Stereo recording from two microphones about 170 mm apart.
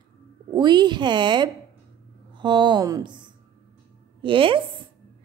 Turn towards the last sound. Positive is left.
turn(degrees=-30)  # may be behind; listen again after turning